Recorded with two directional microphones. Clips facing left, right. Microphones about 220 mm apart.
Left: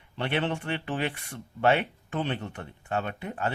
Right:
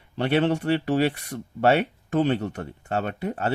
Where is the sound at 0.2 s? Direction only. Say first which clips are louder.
Right 7 dB; 40° right (ahead or behind).